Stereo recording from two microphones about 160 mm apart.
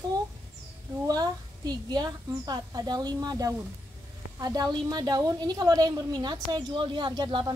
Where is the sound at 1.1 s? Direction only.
25° right (ahead or behind).